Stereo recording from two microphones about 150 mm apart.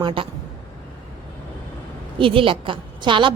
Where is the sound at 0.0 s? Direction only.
35° right (ahead or behind).